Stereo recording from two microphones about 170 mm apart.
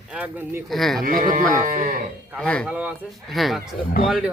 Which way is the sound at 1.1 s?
55° right (ahead or behind).